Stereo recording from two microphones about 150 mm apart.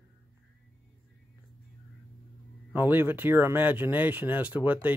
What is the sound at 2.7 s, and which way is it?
Speech, 15° right (ahead or behind).